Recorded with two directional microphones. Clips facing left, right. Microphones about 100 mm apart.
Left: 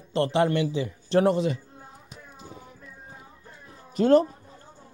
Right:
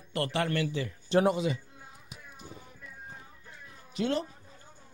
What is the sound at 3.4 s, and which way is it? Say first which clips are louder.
Cat: left 4 dB; 40° left (ahead or behind).